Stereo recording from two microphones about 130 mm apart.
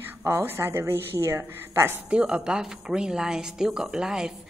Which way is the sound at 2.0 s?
10° right (ahead or behind).